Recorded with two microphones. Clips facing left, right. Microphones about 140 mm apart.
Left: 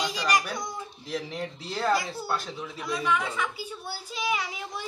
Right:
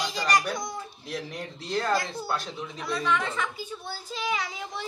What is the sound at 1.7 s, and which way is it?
Speech, 5° left (ahead or behind).